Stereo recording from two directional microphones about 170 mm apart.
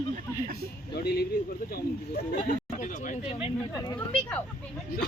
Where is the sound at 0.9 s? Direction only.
70° left (ahead or behind).